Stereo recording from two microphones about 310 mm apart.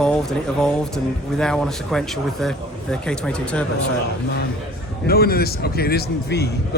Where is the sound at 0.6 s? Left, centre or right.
Centre.